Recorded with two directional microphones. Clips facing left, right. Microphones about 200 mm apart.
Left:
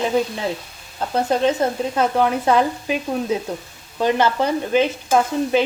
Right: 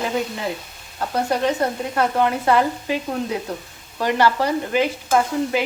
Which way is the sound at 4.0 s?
20° left (ahead or behind).